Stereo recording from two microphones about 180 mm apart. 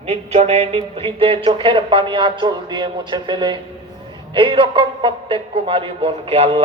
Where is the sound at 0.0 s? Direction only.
35° right (ahead or behind).